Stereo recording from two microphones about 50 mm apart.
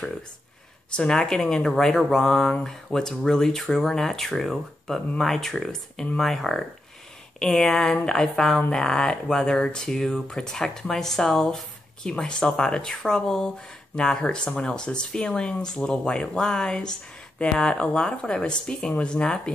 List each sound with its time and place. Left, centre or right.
0.9 s speech: centre